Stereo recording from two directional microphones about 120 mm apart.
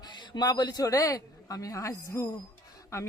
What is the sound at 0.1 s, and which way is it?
A man's voice, 35° left (ahead or behind).